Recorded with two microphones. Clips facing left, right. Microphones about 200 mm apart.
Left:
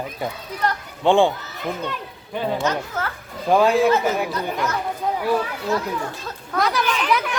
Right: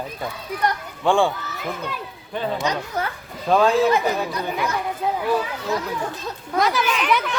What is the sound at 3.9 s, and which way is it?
Speech, 15° right (ahead or behind).